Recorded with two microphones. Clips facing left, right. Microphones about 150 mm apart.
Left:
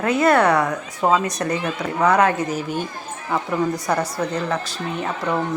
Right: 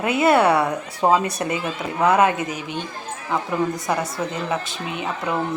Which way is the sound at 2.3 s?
45° left (ahead or behind).